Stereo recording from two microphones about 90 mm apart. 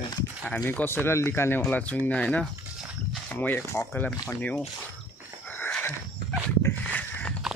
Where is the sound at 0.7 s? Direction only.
25° left (ahead or behind).